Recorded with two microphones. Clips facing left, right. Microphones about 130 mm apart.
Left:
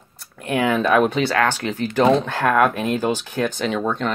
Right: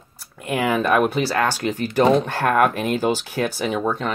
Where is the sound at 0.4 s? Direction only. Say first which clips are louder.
Left 1 dB; 5° right (ahead or behind).